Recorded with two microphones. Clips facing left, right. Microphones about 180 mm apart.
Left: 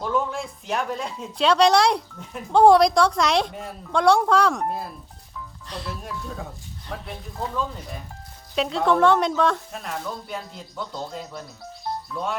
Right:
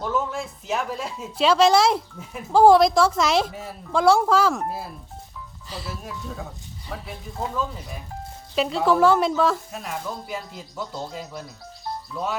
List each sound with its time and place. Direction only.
0.0 s speech: centre (ahead or behind)